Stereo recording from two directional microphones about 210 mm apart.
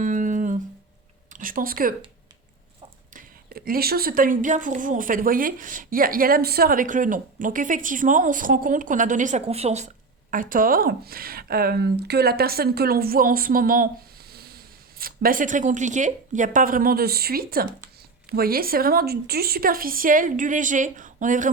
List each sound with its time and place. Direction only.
0.0 s a sound: 35° right (ahead or behind)
1.3 s speech: 40° right (ahead or behind)
3.1 s a woman's voice: 40° right (ahead or behind)